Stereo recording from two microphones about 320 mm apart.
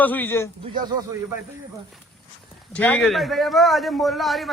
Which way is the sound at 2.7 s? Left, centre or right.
Centre.